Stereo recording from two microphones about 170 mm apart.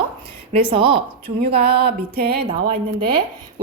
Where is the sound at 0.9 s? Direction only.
70° right (ahead or behind).